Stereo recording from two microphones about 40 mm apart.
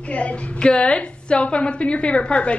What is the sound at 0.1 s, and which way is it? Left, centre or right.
A woman's voice, left.